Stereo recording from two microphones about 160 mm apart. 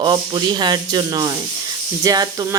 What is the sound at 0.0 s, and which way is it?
Speech, 30° right (ahead or behind).